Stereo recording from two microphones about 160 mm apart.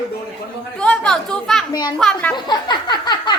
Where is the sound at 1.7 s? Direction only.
25° left (ahead or behind).